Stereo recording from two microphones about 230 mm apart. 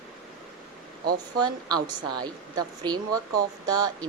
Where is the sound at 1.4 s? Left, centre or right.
Centre.